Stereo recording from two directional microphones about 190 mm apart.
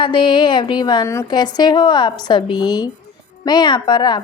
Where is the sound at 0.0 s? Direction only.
25° left (ahead or behind).